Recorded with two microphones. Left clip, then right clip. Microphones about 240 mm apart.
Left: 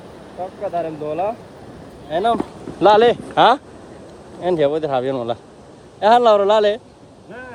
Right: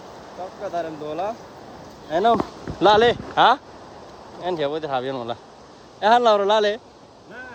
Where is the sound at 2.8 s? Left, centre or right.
Centre.